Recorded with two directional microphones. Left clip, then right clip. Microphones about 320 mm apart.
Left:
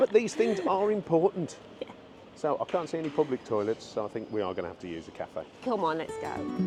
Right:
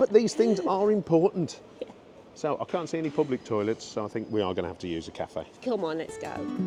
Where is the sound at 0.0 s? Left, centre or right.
Right.